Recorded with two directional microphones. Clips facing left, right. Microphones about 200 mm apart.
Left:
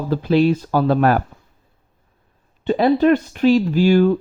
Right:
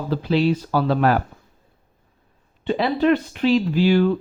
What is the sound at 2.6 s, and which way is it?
Speech, 45° left (ahead or behind).